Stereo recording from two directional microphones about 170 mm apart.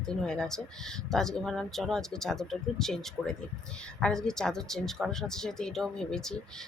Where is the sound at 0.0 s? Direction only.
5° left (ahead or behind).